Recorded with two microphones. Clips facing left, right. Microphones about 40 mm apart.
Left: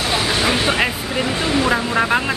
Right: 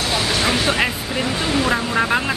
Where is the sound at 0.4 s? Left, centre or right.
Centre.